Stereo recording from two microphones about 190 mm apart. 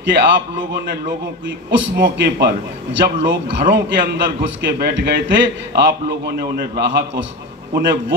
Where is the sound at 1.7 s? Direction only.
70° right (ahead or behind).